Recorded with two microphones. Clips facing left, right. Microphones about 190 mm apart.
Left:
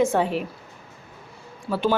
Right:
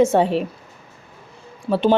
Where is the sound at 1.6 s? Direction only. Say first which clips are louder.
Right 5 dB; 25° right (ahead or behind).